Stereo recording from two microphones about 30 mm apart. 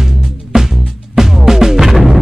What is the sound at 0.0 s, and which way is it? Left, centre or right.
Music, centre.